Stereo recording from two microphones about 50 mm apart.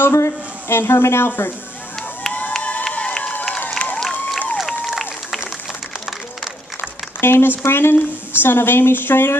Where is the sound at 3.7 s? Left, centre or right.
Left.